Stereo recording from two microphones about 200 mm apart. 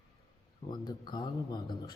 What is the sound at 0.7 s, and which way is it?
Speech, 20° left (ahead or behind).